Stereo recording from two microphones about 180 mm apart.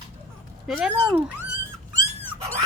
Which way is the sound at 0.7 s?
5° right (ahead or behind).